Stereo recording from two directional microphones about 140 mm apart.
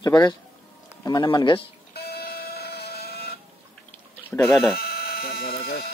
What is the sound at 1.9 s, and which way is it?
Printer, 90° left.